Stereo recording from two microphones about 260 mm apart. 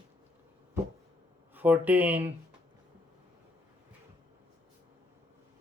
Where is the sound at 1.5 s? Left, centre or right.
Centre.